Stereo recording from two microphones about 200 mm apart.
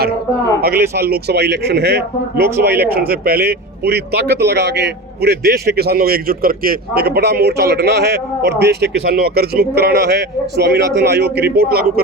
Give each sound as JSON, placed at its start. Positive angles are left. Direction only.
{"t": 0.9, "sound": "speech", "side_deg": -55}